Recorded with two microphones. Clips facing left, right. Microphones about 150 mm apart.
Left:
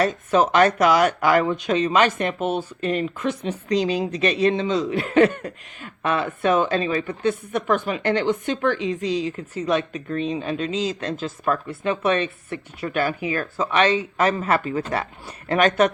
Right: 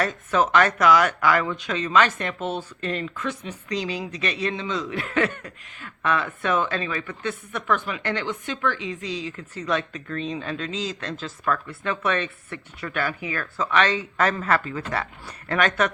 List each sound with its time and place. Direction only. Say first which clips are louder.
0.0 s a woman's voice: left 4 dB; 30° left (ahead or behind)
6.2 s a woman's voice: left 5 dB; 30° left (ahead or behind)